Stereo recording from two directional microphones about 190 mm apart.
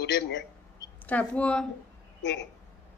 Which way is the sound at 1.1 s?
5° left (ahead or behind).